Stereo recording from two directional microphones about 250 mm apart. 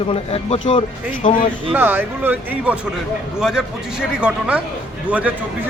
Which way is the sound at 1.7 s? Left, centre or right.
Centre.